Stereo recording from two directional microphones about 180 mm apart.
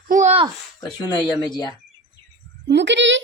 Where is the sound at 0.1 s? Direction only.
40° right (ahead or behind).